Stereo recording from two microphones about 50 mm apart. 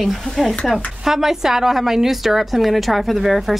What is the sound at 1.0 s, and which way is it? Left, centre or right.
A woman's voice, centre.